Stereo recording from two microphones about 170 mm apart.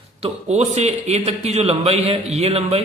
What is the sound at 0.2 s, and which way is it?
A man's voice, 40° right (ahead or behind).